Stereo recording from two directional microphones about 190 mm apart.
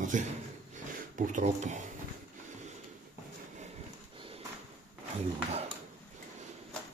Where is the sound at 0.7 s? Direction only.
40° right (ahead or behind).